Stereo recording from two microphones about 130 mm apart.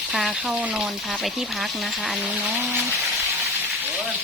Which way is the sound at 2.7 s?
20° right (ahead or behind).